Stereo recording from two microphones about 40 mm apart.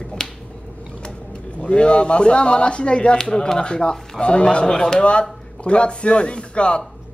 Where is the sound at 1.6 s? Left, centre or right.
Left.